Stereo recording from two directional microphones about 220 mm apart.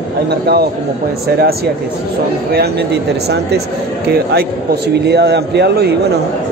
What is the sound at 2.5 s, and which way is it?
Speech, 45° right (ahead or behind).